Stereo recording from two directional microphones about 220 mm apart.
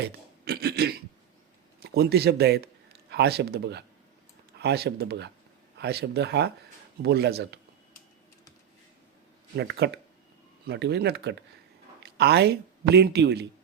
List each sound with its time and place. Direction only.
0.0 s a sound: 50° right (ahead or behind)
1.8 s a man's voice: 45° right (ahead or behind)
9.6 s speech: 50° right (ahead or behind)